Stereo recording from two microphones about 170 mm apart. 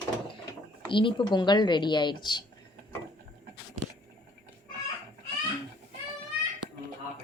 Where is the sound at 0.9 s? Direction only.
30° left (ahead or behind).